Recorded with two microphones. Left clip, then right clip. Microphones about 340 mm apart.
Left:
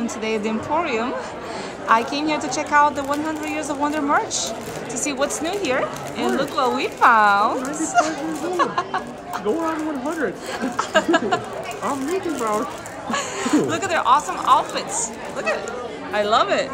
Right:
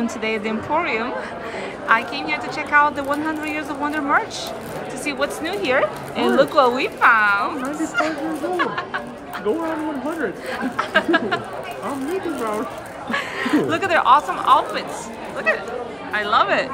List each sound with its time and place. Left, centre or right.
0.0 s a woman's voice: centre
10.8 s a woman's voice: centre
13.1 s a woman's voice: centre